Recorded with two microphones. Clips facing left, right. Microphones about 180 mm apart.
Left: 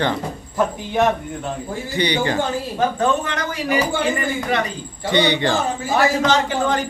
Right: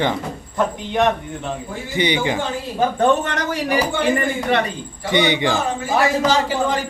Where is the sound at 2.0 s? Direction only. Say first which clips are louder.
Right 1 dB; 15° right (ahead or behind).